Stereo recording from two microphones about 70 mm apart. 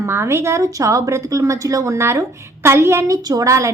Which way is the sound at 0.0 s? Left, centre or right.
Right.